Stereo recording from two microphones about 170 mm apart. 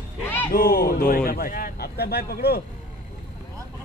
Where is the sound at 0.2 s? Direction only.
10° left (ahead or behind).